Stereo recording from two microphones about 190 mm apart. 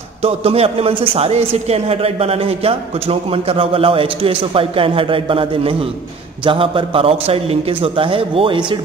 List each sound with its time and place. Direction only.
0.2 s a man's voice: 30° right (ahead or behind)